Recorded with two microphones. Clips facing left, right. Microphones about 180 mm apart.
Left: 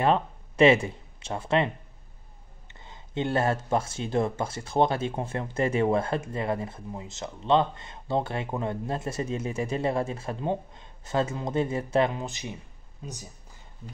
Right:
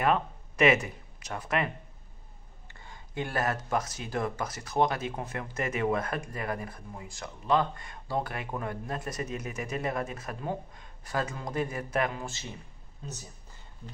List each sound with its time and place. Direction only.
0.0 s speech: 30° left (ahead or behind)
2.7 s speech: 20° left (ahead or behind)